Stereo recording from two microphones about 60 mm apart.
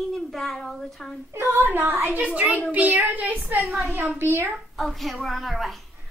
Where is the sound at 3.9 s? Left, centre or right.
Right.